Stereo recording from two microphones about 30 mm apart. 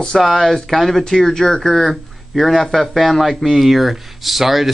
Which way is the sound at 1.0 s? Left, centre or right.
Centre.